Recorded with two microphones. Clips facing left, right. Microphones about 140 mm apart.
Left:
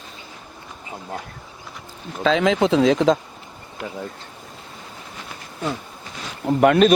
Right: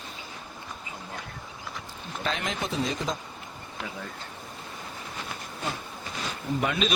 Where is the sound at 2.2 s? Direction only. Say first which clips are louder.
Left 14 dB; 90° left.